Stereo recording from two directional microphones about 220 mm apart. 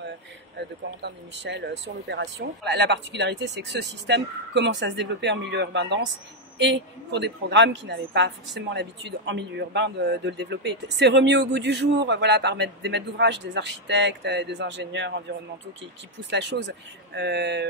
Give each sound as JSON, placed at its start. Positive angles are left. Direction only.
{"t": 1.0, "sound": "a man's voice", "side_deg": -55}